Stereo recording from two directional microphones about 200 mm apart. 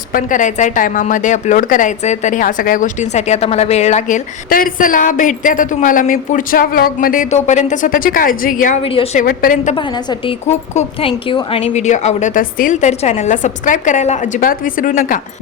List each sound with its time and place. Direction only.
0.1 s a woman's voice: 40° left (ahead or behind)
8.8 s a woman's voice: 25° left (ahead or behind)
9.1 s a woman's voice: 45° left (ahead or behind)
9.7 s a woman's voice: 20° left (ahead or behind)
10.5 s a woman's voice: 35° left (ahead or behind)
11.1 s a woman's voice: 25° left (ahead or behind); by 15.2 s 40° left (ahead or behind)